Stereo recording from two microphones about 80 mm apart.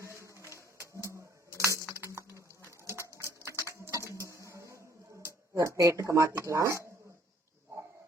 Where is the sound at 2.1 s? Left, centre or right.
Right.